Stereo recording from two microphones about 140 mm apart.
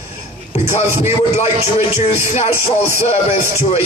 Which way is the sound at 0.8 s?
20° right (ahead or behind).